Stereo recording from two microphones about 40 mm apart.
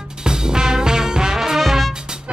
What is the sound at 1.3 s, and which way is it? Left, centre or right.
Music, centre.